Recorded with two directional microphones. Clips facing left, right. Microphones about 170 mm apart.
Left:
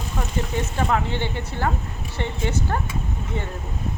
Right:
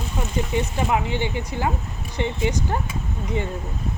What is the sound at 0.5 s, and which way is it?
Speech, 15° right (ahead or behind).